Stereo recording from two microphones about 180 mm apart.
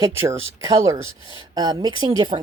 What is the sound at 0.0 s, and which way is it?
Speech, 15° right (ahead or behind).